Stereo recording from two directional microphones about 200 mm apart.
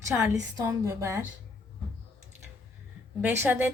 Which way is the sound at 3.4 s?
10° right (ahead or behind).